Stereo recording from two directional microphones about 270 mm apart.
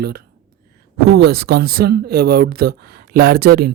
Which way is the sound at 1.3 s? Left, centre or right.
Right.